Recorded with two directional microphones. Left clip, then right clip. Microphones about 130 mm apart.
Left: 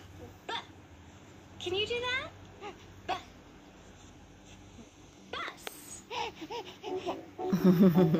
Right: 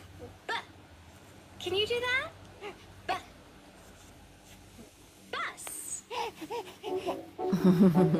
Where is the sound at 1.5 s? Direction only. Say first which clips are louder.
Right 2 dB; centre (ahead or behind).